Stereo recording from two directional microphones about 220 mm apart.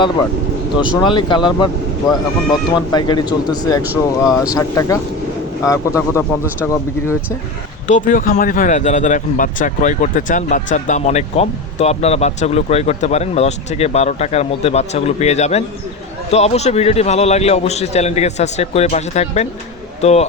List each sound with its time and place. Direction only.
0.8 s a man's voice: 20° left (ahead or behind)
2.7 s a man's voice: 20° left (ahead or behind)
7.9 s a man's voice: 35° left (ahead or behind)